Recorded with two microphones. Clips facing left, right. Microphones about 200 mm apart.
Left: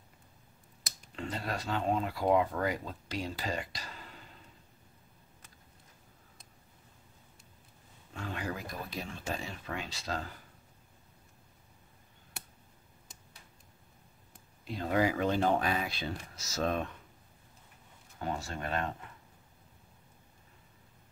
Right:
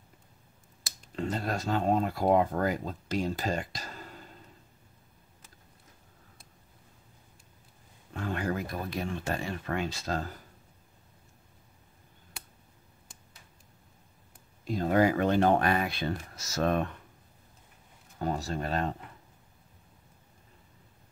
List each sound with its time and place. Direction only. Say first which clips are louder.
1.1 s speech: right 5 dB; 45° right (ahead or behind)
8.1 s speech: right 6 dB; 50° right (ahead or behind)
14.6 s speech: right 5 dB; 45° right (ahead or behind)
18.2 s speech: right 5 dB; 35° right (ahead or behind)